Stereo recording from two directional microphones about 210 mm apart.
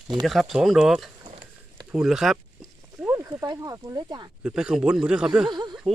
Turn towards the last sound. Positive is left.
turn(degrees=-20)  # may be behind; listen again after turning